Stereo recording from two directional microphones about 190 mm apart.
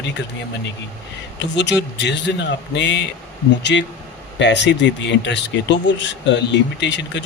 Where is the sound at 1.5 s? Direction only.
65° left (ahead or behind).